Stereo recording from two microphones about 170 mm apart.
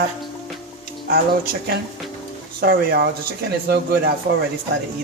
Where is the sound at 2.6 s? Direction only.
65° right (ahead or behind).